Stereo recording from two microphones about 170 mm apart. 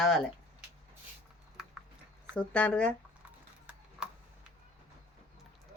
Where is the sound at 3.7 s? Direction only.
10° right (ahead or behind).